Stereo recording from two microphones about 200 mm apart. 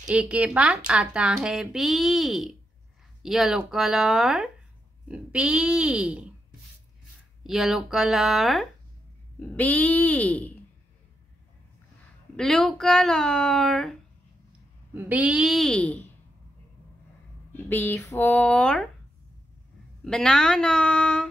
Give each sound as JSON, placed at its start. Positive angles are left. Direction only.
{"t": 0.1, "sound": "speech", "side_deg": -5}
{"t": 7.4, "sound": "speech", "side_deg": 0}
{"t": 12.4, "sound": "speech", "side_deg": 5}
{"t": 15.0, "sound": "speech", "side_deg": -10}
{"t": 17.6, "sound": "speech", "side_deg": 10}
{"t": 20.1, "sound": "speech", "side_deg": 5}